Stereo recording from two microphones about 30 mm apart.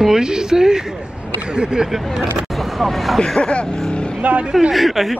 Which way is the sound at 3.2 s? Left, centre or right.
Left.